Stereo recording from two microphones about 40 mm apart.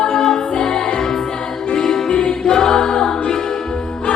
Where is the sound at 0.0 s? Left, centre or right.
Centre.